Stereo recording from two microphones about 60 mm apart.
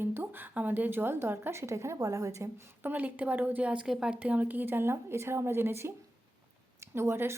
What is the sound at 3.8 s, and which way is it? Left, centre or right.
Speech, centre.